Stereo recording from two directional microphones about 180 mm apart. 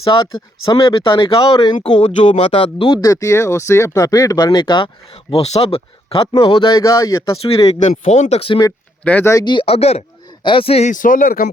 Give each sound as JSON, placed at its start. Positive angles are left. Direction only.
{"t": 0.1, "sound": "speech", "side_deg": 25}
{"t": 2.0, "sound": "speech", "side_deg": 40}
{"t": 7.4, "sound": "speech", "side_deg": 35}
{"t": 9.0, "sound": "speech", "side_deg": 10}